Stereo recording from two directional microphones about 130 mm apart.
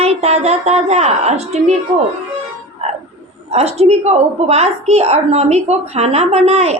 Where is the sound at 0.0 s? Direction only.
55° right (ahead or behind).